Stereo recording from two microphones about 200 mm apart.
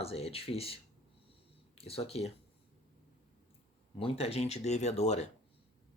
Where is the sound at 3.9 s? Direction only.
30° left (ahead or behind).